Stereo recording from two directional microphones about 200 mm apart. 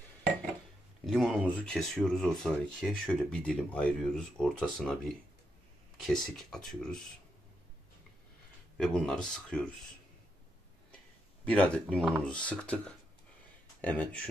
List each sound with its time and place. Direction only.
1.0 s speech: centre (ahead or behind)
8.7 s speech: 5° left (ahead or behind)
11.4 s speech: 5° left (ahead or behind)